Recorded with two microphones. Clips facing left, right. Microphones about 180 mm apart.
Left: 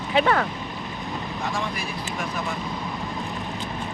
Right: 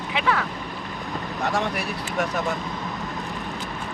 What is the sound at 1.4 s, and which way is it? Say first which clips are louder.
Speech: right 5 dB; 70° right (ahead or behind).